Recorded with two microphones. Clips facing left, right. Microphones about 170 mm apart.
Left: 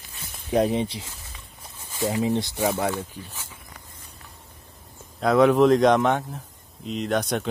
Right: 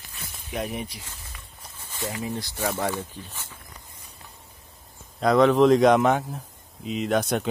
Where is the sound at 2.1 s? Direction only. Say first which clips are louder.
Left 8 dB; 25° left (ahead or behind).